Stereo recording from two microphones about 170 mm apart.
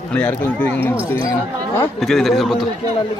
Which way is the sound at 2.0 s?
Centre (ahead or behind).